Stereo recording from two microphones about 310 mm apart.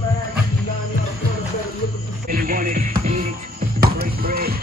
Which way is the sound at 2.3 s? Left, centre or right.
Right.